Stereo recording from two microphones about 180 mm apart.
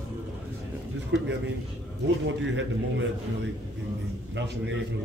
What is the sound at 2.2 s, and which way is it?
Speech, 90° right.